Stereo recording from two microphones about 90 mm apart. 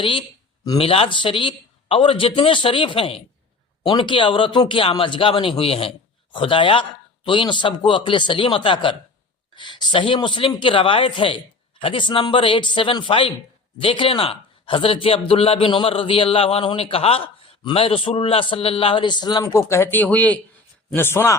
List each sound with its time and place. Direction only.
0.8 s a man's voice: 90° left
3.8 s speech: 65° left (ahead or behind)
4.7 s a man's voice: 80° left
6.3 s a man's voice: 70° left (ahead or behind); by 19.5 s 55° left (ahead or behind)
19.5 s speech: 30° left (ahead or behind)